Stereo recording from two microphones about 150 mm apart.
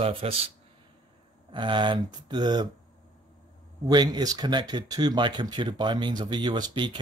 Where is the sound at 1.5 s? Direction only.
30° right (ahead or behind).